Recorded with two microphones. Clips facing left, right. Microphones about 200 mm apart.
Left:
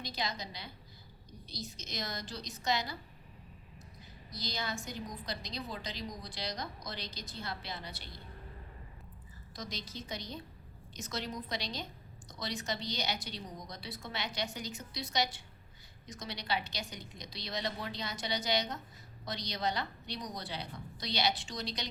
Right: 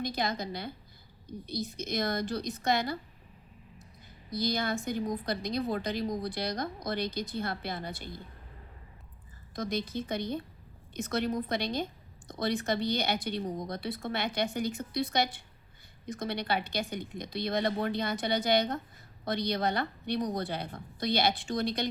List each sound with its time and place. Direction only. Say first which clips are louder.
0.0 s a woman's voice: right 7 dB; 55° right (ahead or behind)
4.3 s a woman's voice: right 9 dB; 55° right (ahead or behind)
9.6 s a woman's voice: right 11 dB; 55° right (ahead or behind)